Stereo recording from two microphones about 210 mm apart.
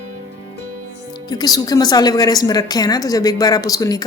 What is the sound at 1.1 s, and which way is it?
Speech, 20° left (ahead or behind).